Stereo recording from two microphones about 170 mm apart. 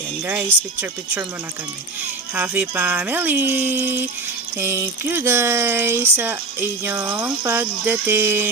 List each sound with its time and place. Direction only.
0.3 s speech: 10° right (ahead or behind)
2.3 s speech: 10° right (ahead or behind)